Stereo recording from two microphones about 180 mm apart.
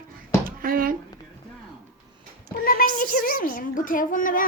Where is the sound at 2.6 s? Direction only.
55° left (ahead or behind).